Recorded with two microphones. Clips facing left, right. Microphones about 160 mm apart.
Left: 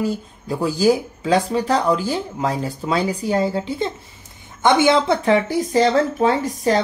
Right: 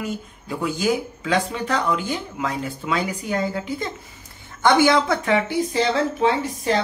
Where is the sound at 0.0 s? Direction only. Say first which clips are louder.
Left 6 dB; 35° left (ahead or behind).